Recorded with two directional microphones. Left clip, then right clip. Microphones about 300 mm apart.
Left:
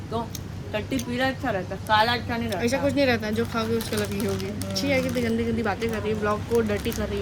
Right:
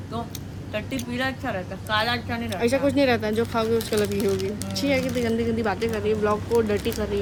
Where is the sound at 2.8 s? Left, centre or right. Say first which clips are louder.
Even; centre.